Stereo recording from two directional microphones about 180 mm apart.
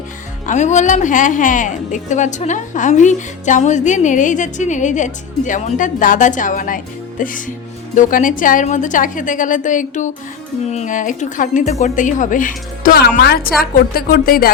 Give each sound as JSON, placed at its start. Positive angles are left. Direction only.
{"t": 0.4, "sound": "a woman's voice", "side_deg": 40}